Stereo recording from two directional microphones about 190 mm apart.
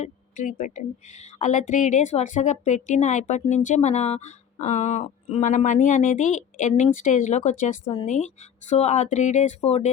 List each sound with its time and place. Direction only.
0.0 s speech: 40° left (ahead or behind)